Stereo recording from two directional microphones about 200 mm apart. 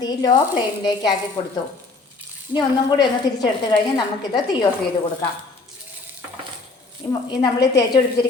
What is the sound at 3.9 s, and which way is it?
Speech, 20° left (ahead or behind).